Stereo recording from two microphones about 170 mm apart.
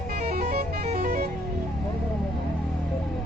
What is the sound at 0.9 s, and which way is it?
Music, 55° right (ahead or behind).